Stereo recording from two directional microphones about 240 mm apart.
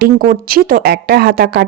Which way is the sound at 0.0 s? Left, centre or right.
Right.